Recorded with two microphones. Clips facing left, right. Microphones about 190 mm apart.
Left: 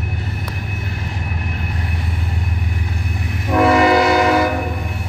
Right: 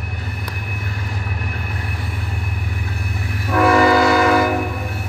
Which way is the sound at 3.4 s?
20° left (ahead or behind).